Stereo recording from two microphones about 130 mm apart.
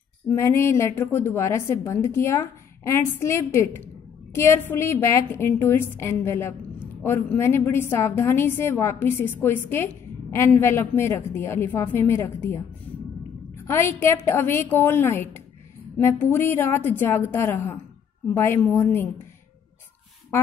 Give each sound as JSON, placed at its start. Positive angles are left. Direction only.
{"t": 0.3, "sound": "a woman's voice", "side_deg": 20}
{"t": 13.7, "sound": "a woman's voice", "side_deg": 20}